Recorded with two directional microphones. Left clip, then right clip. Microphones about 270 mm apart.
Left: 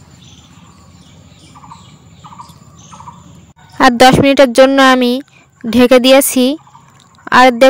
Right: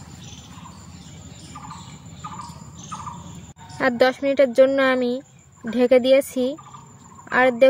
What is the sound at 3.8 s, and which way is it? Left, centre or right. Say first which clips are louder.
Speech: left 12 dB; left.